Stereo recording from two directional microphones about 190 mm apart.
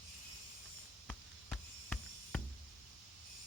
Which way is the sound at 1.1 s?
5° left (ahead or behind).